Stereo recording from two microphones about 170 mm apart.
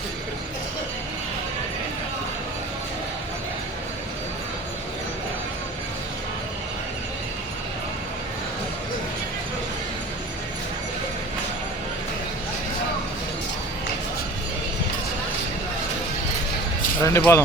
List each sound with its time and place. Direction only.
17.0 s speech: 15° left (ahead or behind)